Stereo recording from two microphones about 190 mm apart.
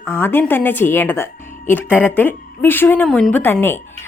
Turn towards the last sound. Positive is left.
turn(degrees=10)  # may be behind; listen again after turning